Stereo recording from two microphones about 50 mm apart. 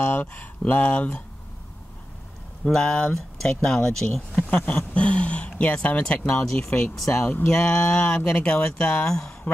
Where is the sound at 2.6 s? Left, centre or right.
Centre.